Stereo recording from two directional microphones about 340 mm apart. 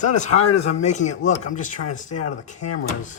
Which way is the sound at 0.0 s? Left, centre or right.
Left.